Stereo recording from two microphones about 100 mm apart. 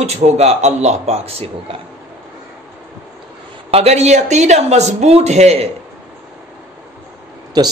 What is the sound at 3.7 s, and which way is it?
A man's voice, 90° right.